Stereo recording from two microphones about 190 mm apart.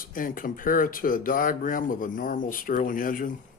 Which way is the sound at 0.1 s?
45° left (ahead or behind).